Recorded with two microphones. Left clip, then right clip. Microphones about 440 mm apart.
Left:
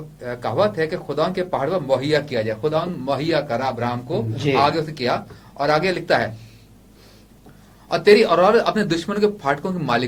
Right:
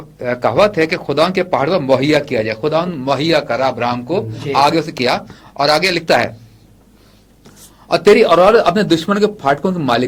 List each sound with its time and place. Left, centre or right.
0.2 s a man's voice: right
7.9 s speech: right